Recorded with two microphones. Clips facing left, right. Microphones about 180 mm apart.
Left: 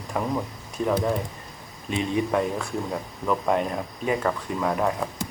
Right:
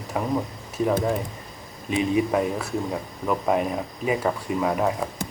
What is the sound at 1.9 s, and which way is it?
Speech, 5° right (ahead or behind).